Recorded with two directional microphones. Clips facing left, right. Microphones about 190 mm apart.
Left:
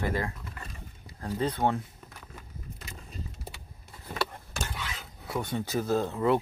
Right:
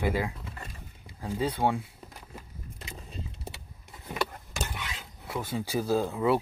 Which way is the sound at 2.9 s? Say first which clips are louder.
Right 3 dB; 30° right (ahead or behind).